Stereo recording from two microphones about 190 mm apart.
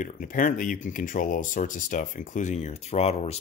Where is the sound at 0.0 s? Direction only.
45° left (ahead or behind).